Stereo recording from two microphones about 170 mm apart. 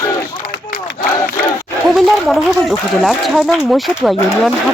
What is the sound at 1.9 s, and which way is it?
Speech, centre (ahead or behind).